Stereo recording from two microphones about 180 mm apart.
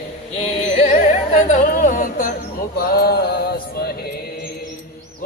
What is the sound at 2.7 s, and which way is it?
Music, 60° left (ahead or behind).